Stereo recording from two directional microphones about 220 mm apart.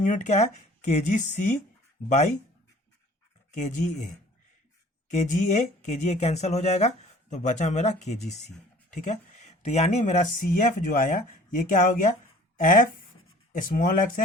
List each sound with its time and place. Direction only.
0.0 s speech: 35° left (ahead or behind)
3.5 s speech: 35° left (ahead or behind)
5.1 s speech: 35° left (ahead or behind)